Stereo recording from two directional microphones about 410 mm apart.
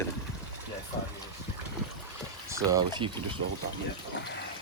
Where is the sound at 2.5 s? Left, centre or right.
Centre.